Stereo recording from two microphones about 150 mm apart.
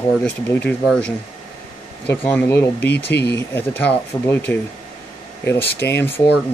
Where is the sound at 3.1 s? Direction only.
90° left.